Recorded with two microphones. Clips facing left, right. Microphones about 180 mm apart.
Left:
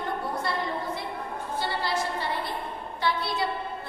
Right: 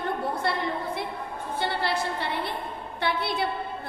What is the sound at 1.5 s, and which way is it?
A woman's voice, 60° right (ahead or behind).